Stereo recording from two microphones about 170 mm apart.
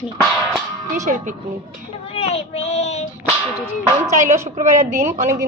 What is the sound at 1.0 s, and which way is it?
Speech, 50° right (ahead or behind).